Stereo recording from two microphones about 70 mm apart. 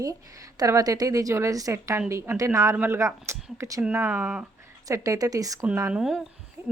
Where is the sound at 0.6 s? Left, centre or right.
Right.